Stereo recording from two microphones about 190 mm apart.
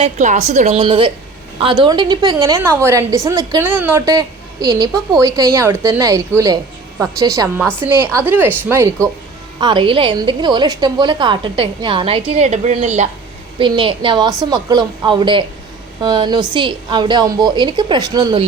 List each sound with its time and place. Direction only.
0.0 s a woman's voice: 40° right (ahead or behind); by 9.0 s 10° right (ahead or behind)
9.6 s a woman's voice: 25° right (ahead or behind)
13.6 s a woman's voice: 25° right (ahead or behind)